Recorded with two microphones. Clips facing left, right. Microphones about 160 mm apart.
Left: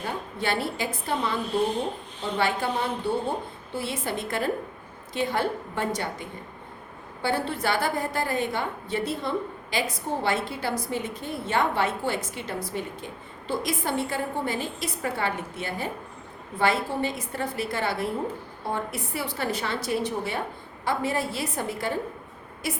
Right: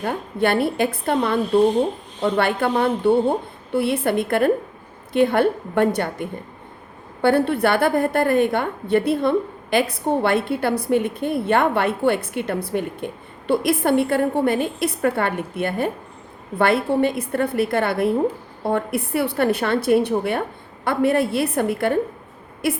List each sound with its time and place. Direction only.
0.0 s a woman's voice: 60° right (ahead or behind)